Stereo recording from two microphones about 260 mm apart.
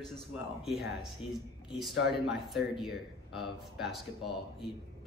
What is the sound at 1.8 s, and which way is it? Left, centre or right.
A man's voice, centre.